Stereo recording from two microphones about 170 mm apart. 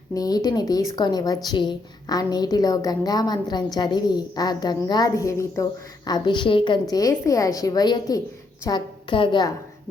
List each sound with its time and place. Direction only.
0.1 s a woman's voice: 20° left (ahead or behind)